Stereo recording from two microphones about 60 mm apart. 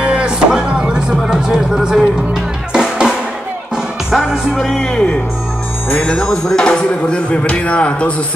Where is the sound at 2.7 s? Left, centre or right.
Centre.